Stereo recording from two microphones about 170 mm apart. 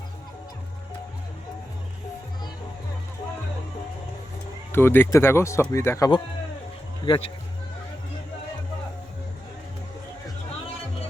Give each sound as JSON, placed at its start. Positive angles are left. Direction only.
{"t": 4.7, "sound": "speech", "side_deg": 15}
{"t": 7.0, "sound": "speech", "side_deg": 30}